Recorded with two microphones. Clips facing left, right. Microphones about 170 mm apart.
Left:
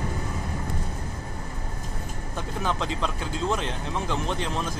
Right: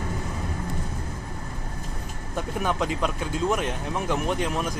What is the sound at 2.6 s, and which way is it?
Speech, 10° right (ahead or behind).